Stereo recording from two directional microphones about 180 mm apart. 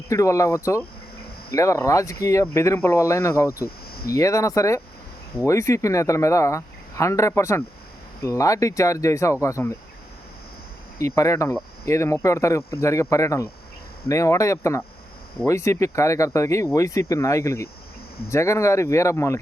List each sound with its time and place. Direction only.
0.1 s speech: 15° left (ahead or behind)
3.6 s cricket: 55° left (ahead or behind)
4.1 s speech: 20° left (ahead or behind)
10.9 s speech: 15° left (ahead or behind)